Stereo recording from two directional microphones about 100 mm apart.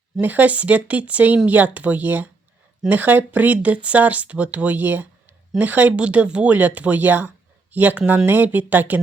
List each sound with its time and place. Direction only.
0.2 s speech: 15° right (ahead or behind)